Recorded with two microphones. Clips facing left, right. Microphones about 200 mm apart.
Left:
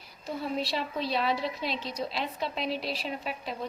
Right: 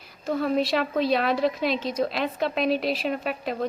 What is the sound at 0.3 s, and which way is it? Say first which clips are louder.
Speech: right 8 dB; 75° right (ahead or behind).